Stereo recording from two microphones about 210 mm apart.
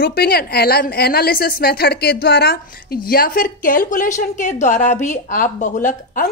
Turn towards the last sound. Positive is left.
turn(degrees=35)  # may be behind; listen again after turning